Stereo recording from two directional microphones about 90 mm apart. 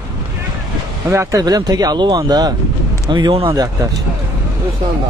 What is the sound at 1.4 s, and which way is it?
Speech, 45° right (ahead or behind).